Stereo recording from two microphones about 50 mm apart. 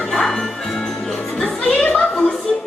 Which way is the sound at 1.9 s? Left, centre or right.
Centre.